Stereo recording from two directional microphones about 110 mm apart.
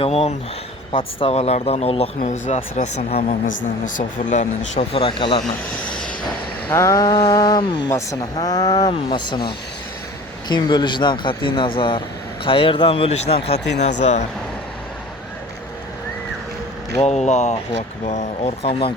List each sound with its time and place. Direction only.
0.0 s speech: 65° left (ahead or behind)
4.4 s speech: 85° left; by 5.4 s 55° left (ahead or behind)
6.7 s a sound: 30° left (ahead or behind)
7.9 s a sound: 25° left (ahead or behind)
9.0 s speech: 45° left (ahead or behind)
10.5 s speech: 45° left (ahead or behind); by 14.3 s 90° left
17.0 s speech: 90° left; by 18.9 s 60° left (ahead or behind)